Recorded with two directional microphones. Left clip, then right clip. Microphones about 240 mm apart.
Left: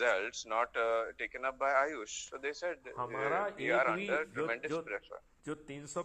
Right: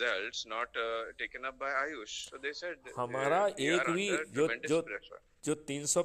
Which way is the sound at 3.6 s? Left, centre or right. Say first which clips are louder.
Even; centre.